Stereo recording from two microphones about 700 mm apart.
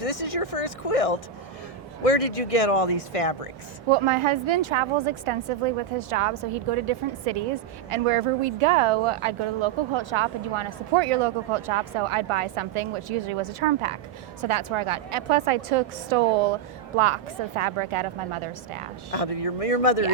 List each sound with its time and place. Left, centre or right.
0.0 s speech: left
3.8 s speech: right
19.1 s speech: left